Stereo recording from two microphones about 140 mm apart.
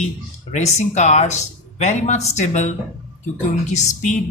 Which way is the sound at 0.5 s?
55° left (ahead or behind).